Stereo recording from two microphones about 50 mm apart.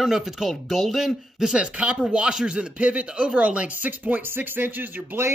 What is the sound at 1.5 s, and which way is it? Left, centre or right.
Speech, right.